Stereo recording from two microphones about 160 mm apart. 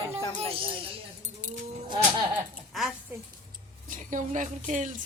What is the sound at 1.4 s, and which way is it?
Livestock, 55° right (ahead or behind).